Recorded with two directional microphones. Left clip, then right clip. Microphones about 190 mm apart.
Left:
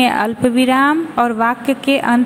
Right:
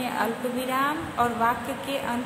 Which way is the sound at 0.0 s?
45° left (ahead or behind).